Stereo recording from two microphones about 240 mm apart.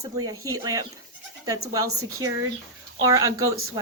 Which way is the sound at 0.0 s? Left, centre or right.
Centre.